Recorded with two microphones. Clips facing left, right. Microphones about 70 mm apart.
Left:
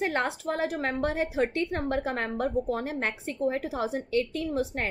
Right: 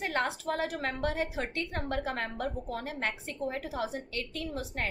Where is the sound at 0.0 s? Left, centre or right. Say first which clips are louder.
Left 3 dB; left.